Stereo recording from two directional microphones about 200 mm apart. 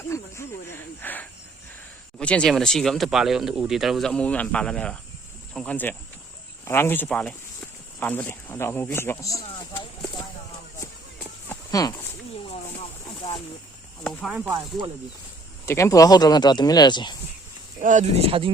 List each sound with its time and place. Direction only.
0.1 s snake: 15° left (ahead or behind)
1.0 s cricket: 10° left (ahead or behind)
2.1 s speech: 5° left (ahead or behind)
9.4 s speech: 30° left (ahead or behind)
11.4 s a sound: 15° left (ahead or behind)
13.1 s a sound: 30° left (ahead or behind)
14.0 s speech: 5° left (ahead or behind)
15.6 s speech: 15° left (ahead or behind)
17.7 s speech: 40° right (ahead or behind)